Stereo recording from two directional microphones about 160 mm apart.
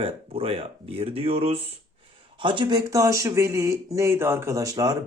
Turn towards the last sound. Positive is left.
turn(degrees=-25)  # may be behind; listen again after turning